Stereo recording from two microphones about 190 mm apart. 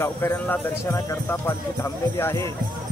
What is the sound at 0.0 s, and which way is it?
Speech, 10° left (ahead or behind).